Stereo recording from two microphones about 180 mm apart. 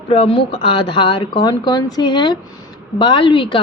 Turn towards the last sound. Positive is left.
turn(degrees=25)  # may be behind; listen again after turning